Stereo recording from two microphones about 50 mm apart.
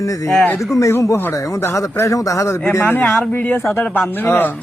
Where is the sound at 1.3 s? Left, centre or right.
Left.